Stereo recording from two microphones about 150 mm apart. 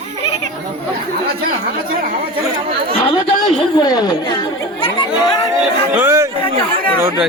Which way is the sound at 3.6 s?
30° left (ahead or behind).